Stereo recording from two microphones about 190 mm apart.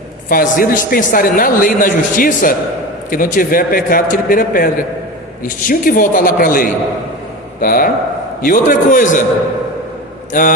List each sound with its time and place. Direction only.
0.3 s a man's voice: 50° left (ahead or behind)
10.3 s a man's voice: 45° left (ahead or behind)